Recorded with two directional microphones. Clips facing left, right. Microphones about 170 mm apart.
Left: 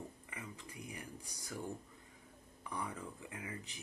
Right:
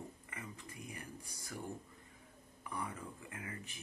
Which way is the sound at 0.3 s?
15° left (ahead or behind).